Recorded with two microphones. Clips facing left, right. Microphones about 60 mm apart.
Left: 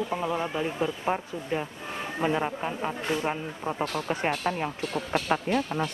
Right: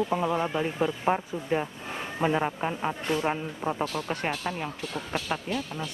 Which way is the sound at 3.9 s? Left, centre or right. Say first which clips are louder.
Left 2 dB; centre.